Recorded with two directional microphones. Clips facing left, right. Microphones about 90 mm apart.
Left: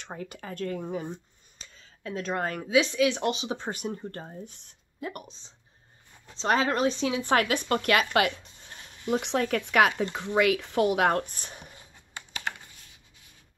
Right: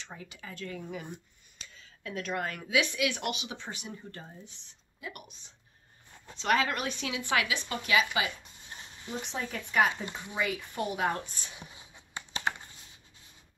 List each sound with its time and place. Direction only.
0.0 s speech: 50° left (ahead or behind)
6.3 s speech: 30° left (ahead or behind); by 8.4 s 65° left (ahead or behind)
9.1 s speech: 75° left (ahead or behind); by 11.9 s 50° left (ahead or behind)
12.3 s computer keyboard: 30° right (ahead or behind)